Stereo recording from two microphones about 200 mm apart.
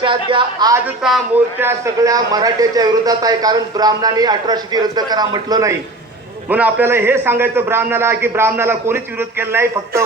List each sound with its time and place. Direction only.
0.0 s a man's voice: 25° right (ahead or behind)
0.9 s a man's voice: 5° right (ahead or behind)
1.6 s a man's voice: 15° right (ahead or behind)